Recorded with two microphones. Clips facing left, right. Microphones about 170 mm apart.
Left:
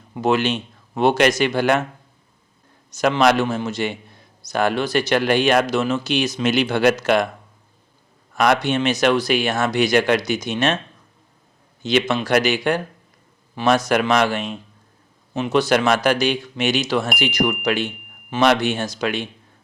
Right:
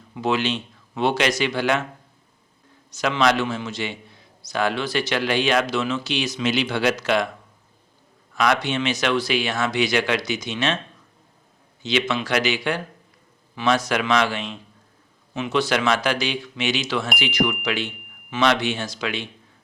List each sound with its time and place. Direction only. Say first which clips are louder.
0.1 s a man's voice: left 4 dB; 50° left (ahead or behind)
3.0 s a man's voice: left 4 dB; 55° left (ahead or behind)
8.4 s a man's voice: left 4 dB; 50° left (ahead or behind)
11.8 s a man's voice: left 4 dB; 50° left (ahead or behind)